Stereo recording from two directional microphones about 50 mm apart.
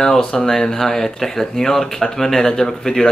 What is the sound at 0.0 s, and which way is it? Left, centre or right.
Speech, centre.